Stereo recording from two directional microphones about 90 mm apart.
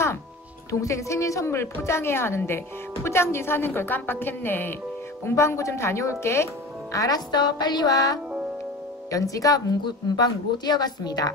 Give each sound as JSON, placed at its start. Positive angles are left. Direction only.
{"t": 0.7, "sound": "a woman's voice", "side_deg": 35}